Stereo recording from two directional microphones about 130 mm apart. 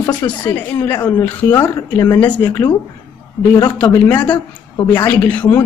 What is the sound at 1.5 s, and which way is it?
Speech, 30° left (ahead or behind).